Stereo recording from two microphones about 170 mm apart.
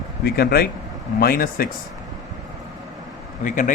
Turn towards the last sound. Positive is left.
turn(degrees=50)  # may be behind; listen again after turning